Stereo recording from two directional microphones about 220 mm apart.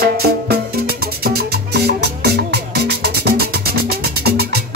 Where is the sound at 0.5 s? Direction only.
45° right (ahead or behind).